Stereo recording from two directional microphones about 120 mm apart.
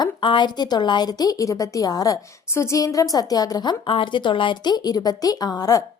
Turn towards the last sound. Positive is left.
turn(degrees=30)  # may be behind; listen again after turning